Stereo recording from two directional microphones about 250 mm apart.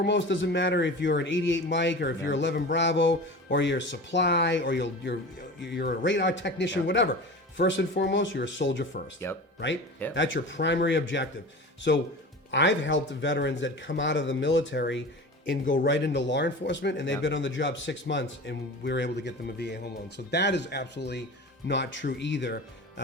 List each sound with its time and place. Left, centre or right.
0.0 s speech: left
10.2 s speech: left
12.5 s speech: left